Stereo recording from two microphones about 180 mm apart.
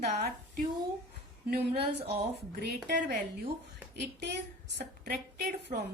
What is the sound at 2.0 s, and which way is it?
Speech, 65° right (ahead or behind).